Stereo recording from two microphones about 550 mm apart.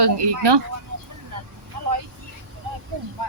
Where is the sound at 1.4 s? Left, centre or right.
Right.